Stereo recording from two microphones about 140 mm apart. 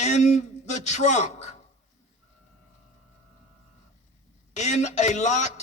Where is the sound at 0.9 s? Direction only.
55° left (ahead or behind).